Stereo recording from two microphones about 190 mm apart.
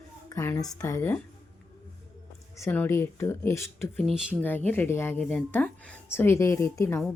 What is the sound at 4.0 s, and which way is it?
Speech, centre (ahead or behind).